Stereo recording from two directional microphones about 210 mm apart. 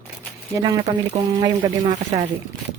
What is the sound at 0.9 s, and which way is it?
Speech, 30° right (ahead or behind).